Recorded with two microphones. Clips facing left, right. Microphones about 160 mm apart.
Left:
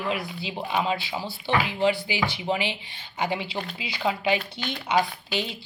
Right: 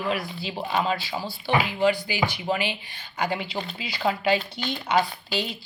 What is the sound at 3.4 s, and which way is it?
Speech, 5° left (ahead or behind).